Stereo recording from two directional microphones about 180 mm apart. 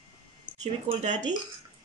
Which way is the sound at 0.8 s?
40° right (ahead or behind).